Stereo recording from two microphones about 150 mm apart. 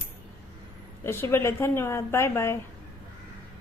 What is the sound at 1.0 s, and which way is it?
A woman's voice, 15° left (ahead or behind).